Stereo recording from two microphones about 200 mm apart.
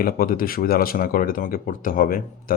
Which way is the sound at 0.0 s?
45° left (ahead or behind).